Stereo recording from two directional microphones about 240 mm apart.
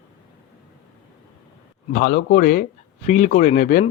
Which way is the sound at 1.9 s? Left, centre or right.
Left.